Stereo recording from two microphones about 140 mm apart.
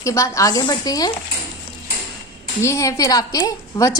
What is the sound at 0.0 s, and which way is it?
A woman's voice, 20° left (ahead or behind).